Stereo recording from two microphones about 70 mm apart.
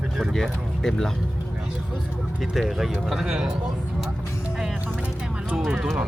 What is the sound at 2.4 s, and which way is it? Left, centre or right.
Speech, centre.